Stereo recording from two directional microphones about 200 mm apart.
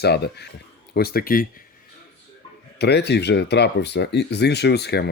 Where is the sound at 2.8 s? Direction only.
55° left (ahead or behind).